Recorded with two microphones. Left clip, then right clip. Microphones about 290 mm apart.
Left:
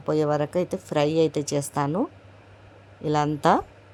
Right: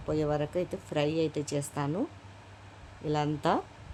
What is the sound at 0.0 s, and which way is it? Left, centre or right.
A woman's voice, left.